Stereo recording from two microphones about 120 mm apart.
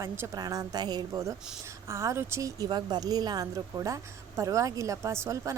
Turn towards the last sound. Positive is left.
turn(degrees=-25)  # may be behind; listen again after turning